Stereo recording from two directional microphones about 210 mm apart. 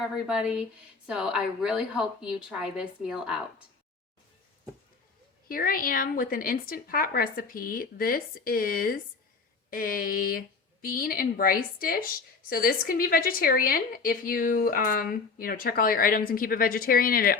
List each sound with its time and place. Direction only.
0.3 s a woman's voice: 5° right (ahead or behind)
5.5 s a woman's voice: 45° left (ahead or behind)